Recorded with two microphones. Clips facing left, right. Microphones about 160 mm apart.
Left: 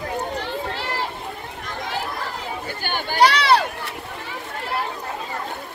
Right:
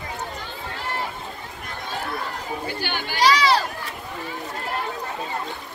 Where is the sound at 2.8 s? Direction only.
55° left (ahead or behind).